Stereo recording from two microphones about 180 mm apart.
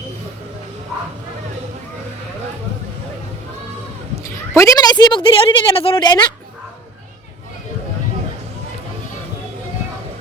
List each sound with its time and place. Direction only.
4.2 s a woman's voice: 15° left (ahead or behind)